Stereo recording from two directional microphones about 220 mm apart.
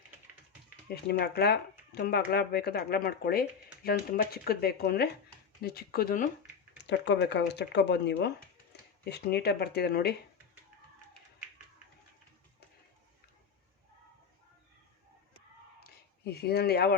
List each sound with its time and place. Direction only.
0.9 s speech: 45° left (ahead or behind)
6.8 s speech: 55° left (ahead or behind)
15.8 s a sound: 45° left (ahead or behind)